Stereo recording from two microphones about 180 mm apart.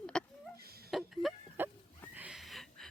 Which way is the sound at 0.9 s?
Centre (ahead or behind).